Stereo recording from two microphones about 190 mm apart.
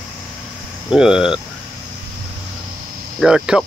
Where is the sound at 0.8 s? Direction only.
5° right (ahead or behind).